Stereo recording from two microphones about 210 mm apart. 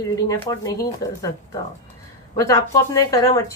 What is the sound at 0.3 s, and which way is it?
Speech, 15° left (ahead or behind).